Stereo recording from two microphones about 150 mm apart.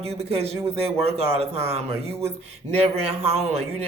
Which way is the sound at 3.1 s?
40° right (ahead or behind).